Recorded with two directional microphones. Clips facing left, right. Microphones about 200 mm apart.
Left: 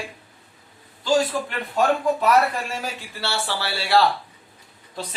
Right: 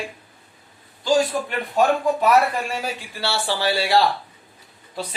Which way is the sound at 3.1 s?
15° right (ahead or behind).